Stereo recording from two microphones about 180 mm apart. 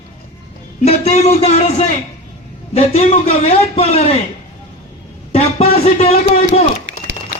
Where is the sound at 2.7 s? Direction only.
35° left (ahead or behind).